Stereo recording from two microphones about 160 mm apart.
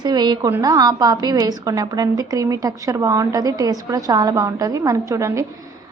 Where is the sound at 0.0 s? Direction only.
25° right (ahead or behind).